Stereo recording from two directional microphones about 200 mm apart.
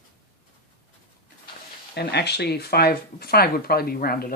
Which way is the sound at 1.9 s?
55° left (ahead or behind).